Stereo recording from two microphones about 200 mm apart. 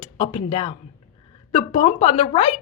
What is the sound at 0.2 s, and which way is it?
A woman's voice, 30° left (ahead or behind).